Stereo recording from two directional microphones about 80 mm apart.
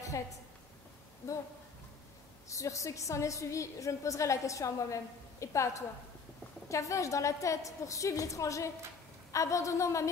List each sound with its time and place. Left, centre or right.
2.5 s a woman's voice: left